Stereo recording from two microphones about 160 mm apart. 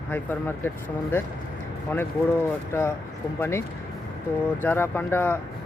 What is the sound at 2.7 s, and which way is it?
Speech, 15° left (ahead or behind).